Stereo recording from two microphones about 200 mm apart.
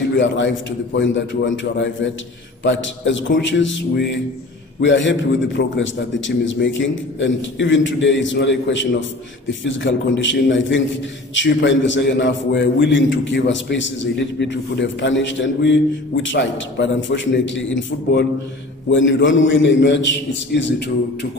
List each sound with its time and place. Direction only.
0.1 s a man's voice: 65° left (ahead or behind)
18.9 s a man's voice: 70° left (ahead or behind)